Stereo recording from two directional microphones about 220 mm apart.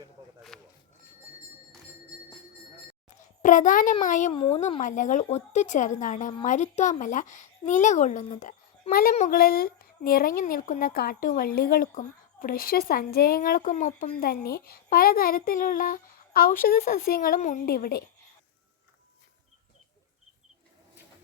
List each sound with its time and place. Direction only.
0.5 s a sound: 5° left (ahead or behind)
3.4 s a child's voice: 35° left (ahead or behind)
4.3 s speech: 25° left (ahead or behind); by 18.0 s 45° left (ahead or behind)